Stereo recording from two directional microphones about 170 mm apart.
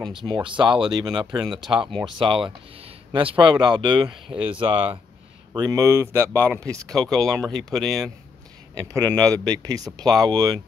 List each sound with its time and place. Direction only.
0.2 s speech: 30° right (ahead or behind)
1.8 s speech: 5° right (ahead or behind)
2.1 s speech: 30° right (ahead or behind)
5.5 s speech: 20° right (ahead or behind)
6.9 s speech: centre (ahead or behind)
8.7 s speech: 20° right (ahead or behind)